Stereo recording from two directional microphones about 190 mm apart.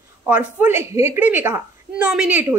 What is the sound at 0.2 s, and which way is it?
A woman's voice, 10° right (ahead or behind).